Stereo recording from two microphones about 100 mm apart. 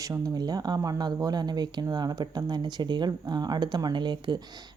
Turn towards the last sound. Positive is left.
turn(degrees=-45)  # may be behind; listen again after turning